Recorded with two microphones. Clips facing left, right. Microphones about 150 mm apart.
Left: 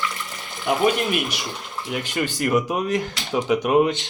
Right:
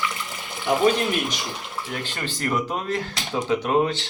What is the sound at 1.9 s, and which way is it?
Speech, 15° left (ahead or behind).